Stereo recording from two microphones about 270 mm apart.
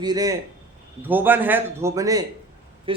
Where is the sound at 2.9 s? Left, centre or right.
Centre.